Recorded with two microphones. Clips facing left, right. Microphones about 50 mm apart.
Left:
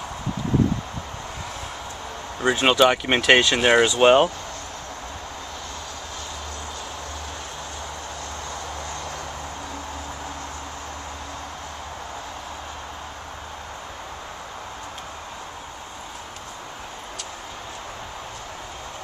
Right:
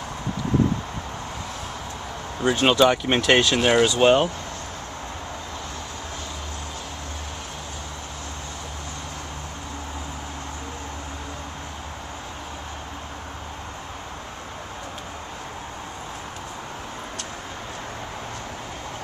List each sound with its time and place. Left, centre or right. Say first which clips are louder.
2.4 s speech: even; centre